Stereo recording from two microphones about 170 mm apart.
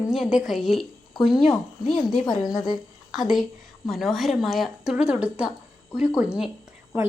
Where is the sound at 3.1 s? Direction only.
Centre (ahead or behind).